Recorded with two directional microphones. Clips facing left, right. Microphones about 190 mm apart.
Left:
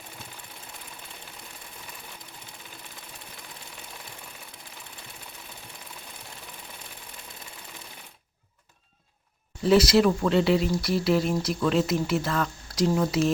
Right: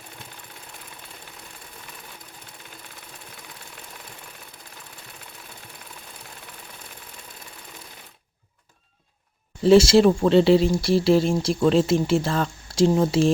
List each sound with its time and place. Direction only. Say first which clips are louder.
9.6 s speech: right 5 dB; 25° right (ahead or behind)